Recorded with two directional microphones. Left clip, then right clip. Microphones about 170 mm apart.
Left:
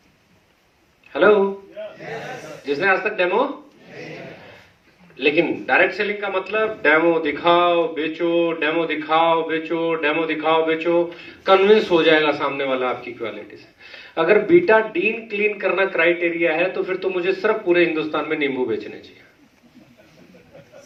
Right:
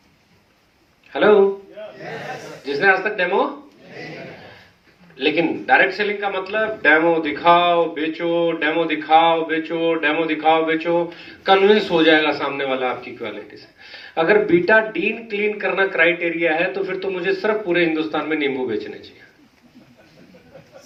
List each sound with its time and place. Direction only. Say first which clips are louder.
1.1 s speech: even; 15° right (ahead or behind)
2.6 s speech: right 2 dB; 15° right (ahead or behind)
5.1 s speech: left 1 dB; 15° right (ahead or behind)